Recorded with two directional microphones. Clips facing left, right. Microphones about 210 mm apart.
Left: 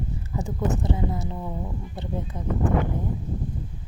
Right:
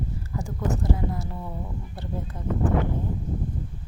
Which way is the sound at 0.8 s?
20° left (ahead or behind).